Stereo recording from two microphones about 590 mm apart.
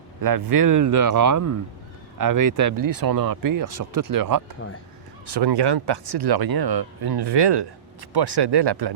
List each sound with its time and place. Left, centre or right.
0.2 s speech: right